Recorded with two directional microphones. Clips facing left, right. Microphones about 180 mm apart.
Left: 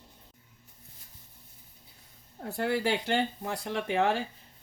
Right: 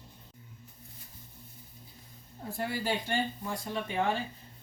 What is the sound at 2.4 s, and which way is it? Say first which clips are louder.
Speech: left 5 dB; 70° left (ahead or behind).